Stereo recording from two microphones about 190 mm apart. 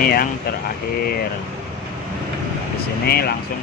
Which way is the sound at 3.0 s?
55° left (ahead or behind).